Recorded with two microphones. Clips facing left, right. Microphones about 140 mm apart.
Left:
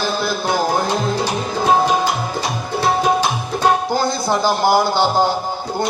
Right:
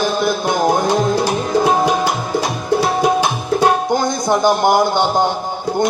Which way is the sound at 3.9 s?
5° left (ahead or behind).